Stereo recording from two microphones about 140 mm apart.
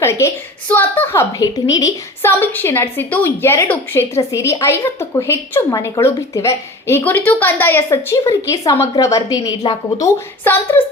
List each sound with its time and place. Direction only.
0.0 s a woman's voice: 20° left (ahead or behind)
2.2 s a woman's voice: 15° left (ahead or behind)
9.6 s a woman's voice: 35° left (ahead or behind)
10.0 s a woman's voice: 15° left (ahead or behind)